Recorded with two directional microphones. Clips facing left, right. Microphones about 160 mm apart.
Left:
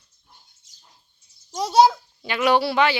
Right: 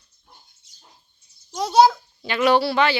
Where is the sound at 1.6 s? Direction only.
10° left (ahead or behind).